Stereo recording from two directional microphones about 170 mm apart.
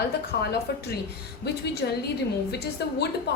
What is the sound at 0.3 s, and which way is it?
Speech, 70° left (ahead or behind).